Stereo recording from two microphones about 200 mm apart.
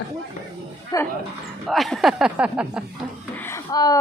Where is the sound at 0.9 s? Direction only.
20° left (ahead or behind).